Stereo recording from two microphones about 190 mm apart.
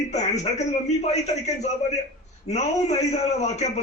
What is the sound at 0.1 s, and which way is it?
A man's voice, 35° left (ahead or behind).